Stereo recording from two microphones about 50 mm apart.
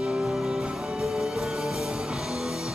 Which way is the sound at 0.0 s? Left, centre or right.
Centre.